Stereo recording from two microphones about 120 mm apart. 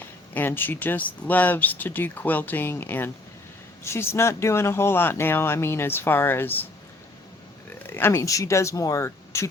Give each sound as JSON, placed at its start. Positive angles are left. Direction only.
{"t": 0.3, "sound": "speech", "side_deg": 15}
{"t": 7.9, "sound": "speech", "side_deg": 20}